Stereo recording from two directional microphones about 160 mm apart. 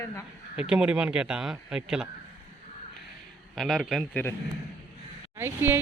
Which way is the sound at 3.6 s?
Centre (ahead or behind).